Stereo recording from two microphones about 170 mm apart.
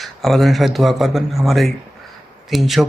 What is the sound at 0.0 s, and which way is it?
Speech, centre (ahead or behind).